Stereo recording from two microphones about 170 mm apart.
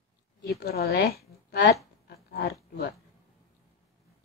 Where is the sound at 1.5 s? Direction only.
75° left (ahead or behind).